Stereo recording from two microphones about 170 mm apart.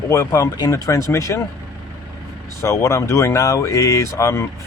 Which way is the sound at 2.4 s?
15° left (ahead or behind).